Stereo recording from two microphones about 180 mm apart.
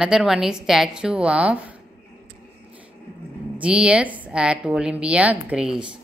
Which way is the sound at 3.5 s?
5° right (ahead or behind).